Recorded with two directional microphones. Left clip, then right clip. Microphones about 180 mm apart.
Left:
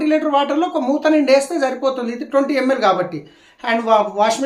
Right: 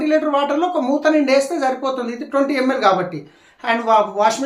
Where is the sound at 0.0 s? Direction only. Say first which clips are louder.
Left 1 dB; 25° left (ahead or behind).